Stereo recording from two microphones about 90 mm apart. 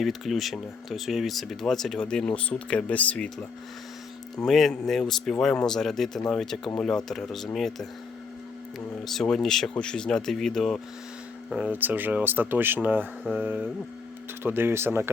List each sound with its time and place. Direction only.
0.0 s speech: centre (ahead or behind)
4.4 s speech: centre (ahead or behind)
9.0 s speech: 5° left (ahead or behind)
11.5 s speech: 15° right (ahead or behind)